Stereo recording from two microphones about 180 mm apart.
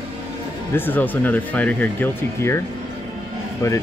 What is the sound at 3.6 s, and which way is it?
Speech, 15° left (ahead or behind).